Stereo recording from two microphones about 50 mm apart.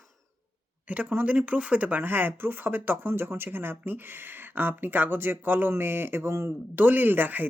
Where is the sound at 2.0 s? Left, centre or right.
Right.